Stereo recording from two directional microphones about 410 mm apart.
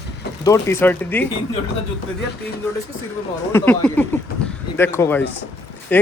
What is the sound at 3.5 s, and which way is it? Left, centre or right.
A man's voice, centre.